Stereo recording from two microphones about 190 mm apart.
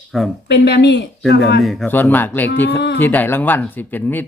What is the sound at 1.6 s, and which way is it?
A man's voice, 5° left (ahead or behind).